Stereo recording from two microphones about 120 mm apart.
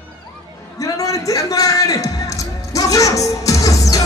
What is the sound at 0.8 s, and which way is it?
Music, 30° left (ahead or behind).